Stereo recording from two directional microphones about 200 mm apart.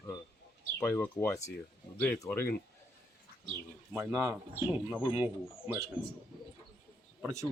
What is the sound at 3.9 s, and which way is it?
Speech, 15° right (ahead or behind).